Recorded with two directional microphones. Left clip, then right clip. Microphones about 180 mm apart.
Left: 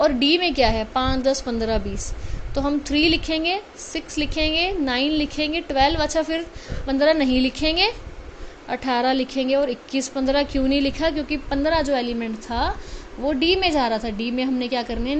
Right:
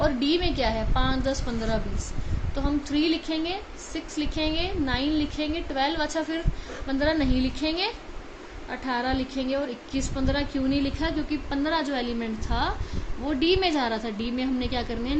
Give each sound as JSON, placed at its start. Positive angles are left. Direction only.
{"t": 0.0, "sound": "a woman's voice", "side_deg": 40}